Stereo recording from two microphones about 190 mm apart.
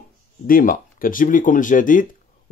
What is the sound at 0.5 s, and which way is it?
Speech, 50° left (ahead or behind).